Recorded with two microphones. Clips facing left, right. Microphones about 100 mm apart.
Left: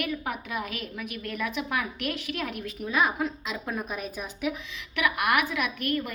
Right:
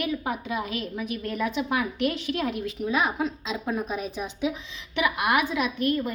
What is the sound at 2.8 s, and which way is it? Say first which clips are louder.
A woman's voice: even; 20° right (ahead or behind).